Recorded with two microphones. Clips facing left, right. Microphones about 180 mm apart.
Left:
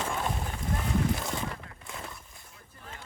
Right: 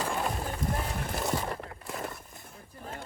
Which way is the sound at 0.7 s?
55° right (ahead or behind).